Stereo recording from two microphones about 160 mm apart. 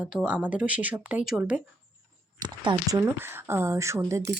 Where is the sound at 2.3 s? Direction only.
30° right (ahead or behind).